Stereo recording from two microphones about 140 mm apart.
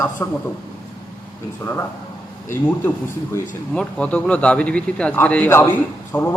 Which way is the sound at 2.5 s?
15° left (ahead or behind).